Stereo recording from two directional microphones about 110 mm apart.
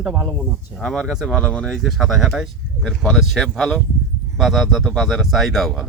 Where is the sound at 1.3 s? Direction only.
10° left (ahead or behind).